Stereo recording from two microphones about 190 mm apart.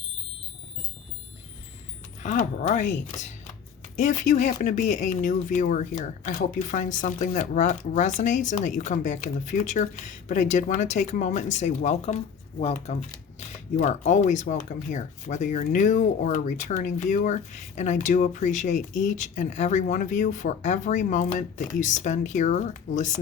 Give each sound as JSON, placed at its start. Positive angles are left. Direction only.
{"t": 2.2, "sound": "speech", "side_deg": 40}
{"t": 3.2, "sound": "shuffling cards", "side_deg": 40}
{"t": 3.9, "sound": "speech", "side_deg": 40}